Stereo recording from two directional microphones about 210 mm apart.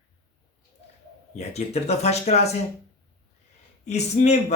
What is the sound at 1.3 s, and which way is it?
Speech, 30° left (ahead or behind).